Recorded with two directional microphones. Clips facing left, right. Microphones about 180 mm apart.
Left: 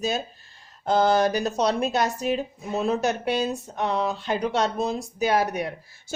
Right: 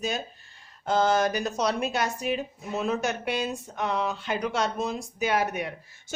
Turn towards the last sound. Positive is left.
turn(degrees=40)  # may be behind; listen again after turning